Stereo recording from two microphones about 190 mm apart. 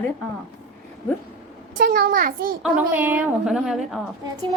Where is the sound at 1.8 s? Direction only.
50° right (ahead or behind).